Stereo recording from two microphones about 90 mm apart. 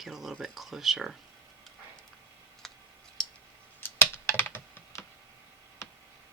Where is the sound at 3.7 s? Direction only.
25° left (ahead or behind).